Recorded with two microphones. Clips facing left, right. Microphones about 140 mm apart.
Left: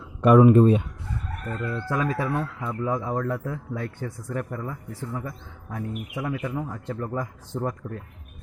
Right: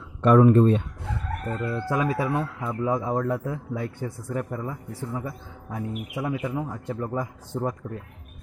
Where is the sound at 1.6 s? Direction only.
15° right (ahead or behind).